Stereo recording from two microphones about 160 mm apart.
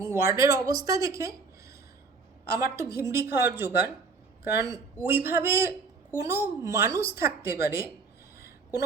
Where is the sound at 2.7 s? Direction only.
20° right (ahead or behind).